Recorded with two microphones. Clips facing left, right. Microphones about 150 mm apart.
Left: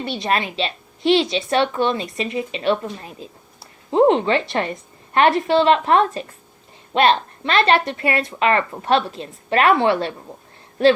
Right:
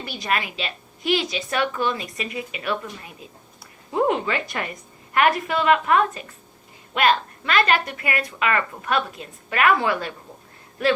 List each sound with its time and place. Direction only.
0.0 s a woman's voice: 25° left (ahead or behind)